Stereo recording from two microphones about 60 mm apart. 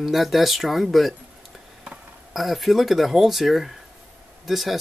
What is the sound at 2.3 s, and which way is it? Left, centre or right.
Speech, centre.